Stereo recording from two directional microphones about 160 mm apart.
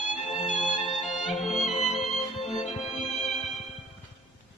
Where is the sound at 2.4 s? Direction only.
35° left (ahead or behind).